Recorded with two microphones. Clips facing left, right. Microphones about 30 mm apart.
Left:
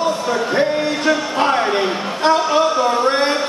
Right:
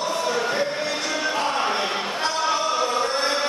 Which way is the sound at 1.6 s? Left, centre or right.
Centre.